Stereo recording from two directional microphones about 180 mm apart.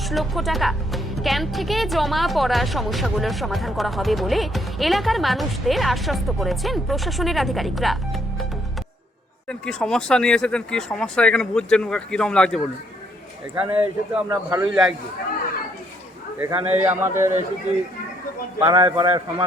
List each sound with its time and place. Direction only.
0.0 s speech: centre (ahead or behind)
9.5 s speech: 5° left (ahead or behind)
13.6 s a man's voice: 5° right (ahead or behind)
16.4 s a man's voice: 10° right (ahead or behind)
18.6 s a man's voice: 20° right (ahead or behind)